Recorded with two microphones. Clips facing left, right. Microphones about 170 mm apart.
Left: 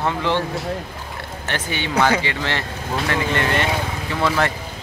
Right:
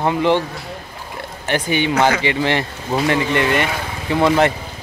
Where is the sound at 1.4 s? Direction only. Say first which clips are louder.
Right 8 dB; 15° right (ahead or behind).